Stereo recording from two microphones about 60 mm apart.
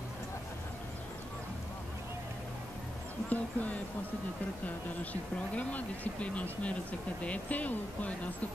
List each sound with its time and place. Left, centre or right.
3.3 s speech: left